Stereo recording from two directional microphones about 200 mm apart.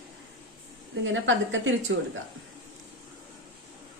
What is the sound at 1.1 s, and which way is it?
Speech, 70° right (ahead or behind).